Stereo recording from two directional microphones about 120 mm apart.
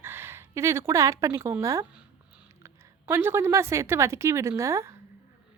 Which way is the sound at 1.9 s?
10° right (ahead or behind).